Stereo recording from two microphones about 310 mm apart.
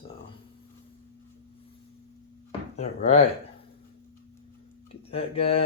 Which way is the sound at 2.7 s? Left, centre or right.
Left.